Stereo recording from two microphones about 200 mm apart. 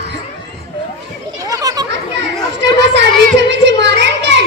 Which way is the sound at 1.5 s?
15° right (ahead or behind).